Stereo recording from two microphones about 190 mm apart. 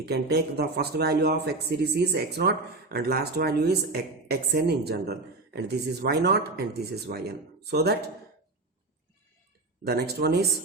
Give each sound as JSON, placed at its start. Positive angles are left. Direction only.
{"t": 0.0, "sound": "a man's voice", "side_deg": -60}
{"t": 9.8, "sound": "a man's voice", "side_deg": -55}